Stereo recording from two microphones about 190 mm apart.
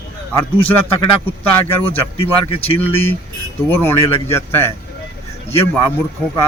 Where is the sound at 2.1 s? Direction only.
30° left (ahead or behind).